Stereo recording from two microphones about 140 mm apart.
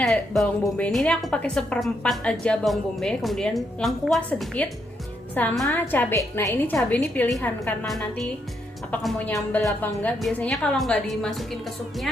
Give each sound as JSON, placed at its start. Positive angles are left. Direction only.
{"t": 0.0, "sound": "a woman's voice", "side_deg": 5}